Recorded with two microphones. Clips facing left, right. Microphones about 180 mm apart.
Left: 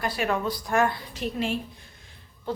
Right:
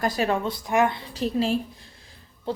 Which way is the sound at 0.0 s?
40° right (ahead or behind).